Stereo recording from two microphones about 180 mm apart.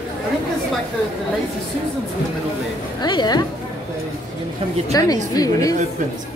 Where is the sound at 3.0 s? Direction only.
25° left (ahead or behind).